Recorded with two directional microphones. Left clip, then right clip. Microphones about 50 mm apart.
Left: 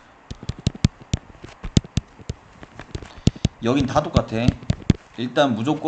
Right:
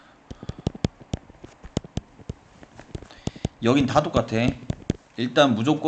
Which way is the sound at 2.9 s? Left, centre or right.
Right.